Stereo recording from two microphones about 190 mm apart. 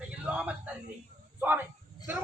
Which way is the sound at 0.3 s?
5° right (ahead or behind).